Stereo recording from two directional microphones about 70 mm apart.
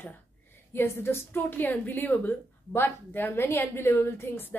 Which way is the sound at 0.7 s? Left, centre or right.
Left.